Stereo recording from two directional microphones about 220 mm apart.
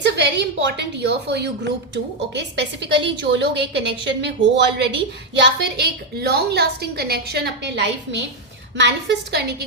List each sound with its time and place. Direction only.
0.0 s a woman's voice: 50° right (ahead or behind)